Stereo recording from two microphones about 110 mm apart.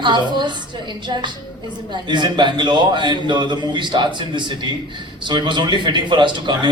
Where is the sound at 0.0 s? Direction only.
45° right (ahead or behind).